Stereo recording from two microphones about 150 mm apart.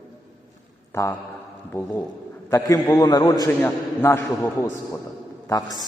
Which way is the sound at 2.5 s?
20° left (ahead or behind).